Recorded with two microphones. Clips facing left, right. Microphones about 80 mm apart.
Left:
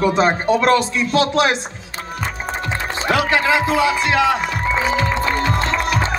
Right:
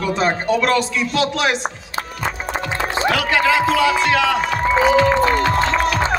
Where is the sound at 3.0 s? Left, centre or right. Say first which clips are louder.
Left 1 dB; left.